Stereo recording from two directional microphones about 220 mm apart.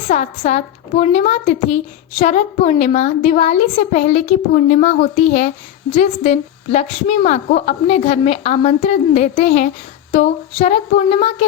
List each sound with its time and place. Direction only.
0.1 s a woman's voice: 30° left (ahead or behind)